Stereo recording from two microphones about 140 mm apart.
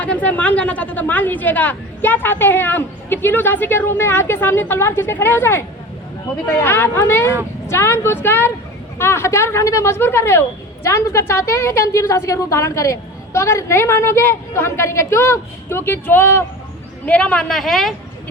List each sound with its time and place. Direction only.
0.0 s a woman's voice: 10° left (ahead or behind)